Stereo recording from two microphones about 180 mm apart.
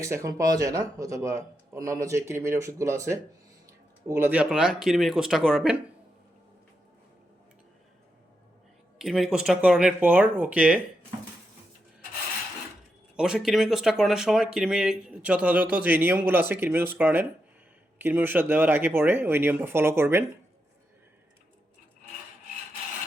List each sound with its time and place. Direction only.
0.0 s speech: 15° right (ahead or behind)
9.0 s speech: 5° right (ahead or behind)
13.1 s speech: 5° right (ahead or behind)